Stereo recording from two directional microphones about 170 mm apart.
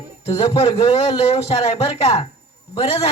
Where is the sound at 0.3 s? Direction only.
35° left (ahead or behind).